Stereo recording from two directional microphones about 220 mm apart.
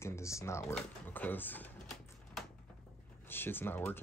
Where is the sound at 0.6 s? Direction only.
5° left (ahead or behind).